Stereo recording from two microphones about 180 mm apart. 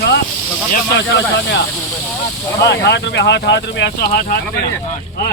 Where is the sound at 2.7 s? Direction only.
70° left (ahead or behind).